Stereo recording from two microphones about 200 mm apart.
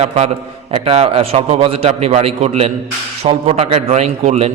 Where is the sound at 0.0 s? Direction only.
35° right (ahead or behind).